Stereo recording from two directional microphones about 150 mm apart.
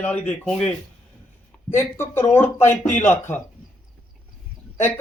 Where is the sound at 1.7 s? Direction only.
15° left (ahead or behind).